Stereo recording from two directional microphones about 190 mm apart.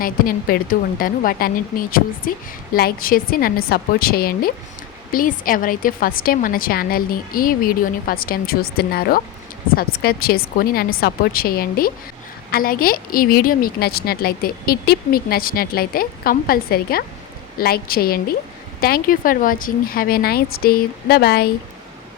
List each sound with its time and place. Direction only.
0.0 s a woman's voice: 50° left (ahead or behind)